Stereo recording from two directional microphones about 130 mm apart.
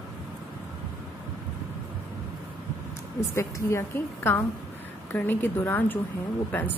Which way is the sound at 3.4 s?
20° left (ahead or behind).